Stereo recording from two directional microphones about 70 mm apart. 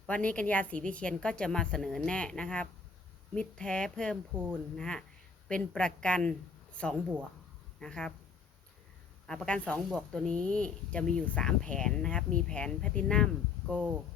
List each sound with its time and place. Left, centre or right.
0.1 s speech: centre
7.8 s speech: centre
9.2 s speech: centre
9.6 s speech: centre
9.9 s speech: centre
13.7 s speech: centre